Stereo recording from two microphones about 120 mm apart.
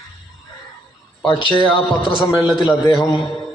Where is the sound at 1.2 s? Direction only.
45° left (ahead or behind).